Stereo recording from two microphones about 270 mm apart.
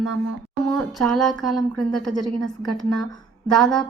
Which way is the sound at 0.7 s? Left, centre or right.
Centre.